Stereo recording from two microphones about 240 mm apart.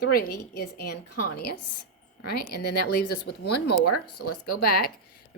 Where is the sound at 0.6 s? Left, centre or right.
Left.